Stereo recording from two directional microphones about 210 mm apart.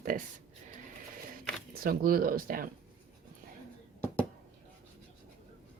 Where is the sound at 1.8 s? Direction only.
45° right (ahead or behind).